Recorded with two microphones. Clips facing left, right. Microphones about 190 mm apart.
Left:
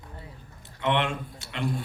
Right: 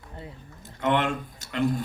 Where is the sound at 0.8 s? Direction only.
45° right (ahead or behind).